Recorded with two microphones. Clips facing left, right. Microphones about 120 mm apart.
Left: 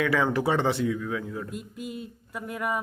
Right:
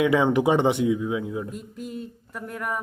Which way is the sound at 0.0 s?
20° right (ahead or behind).